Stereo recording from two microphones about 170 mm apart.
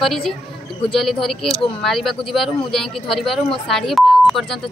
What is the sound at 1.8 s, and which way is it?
A woman's voice, centre (ahead or behind).